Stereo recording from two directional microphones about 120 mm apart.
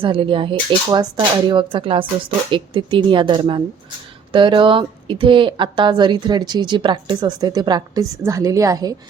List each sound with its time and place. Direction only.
0.0 s a woman's voice: 45° right (ahead or behind); by 9.0 s 30° right (ahead or behind)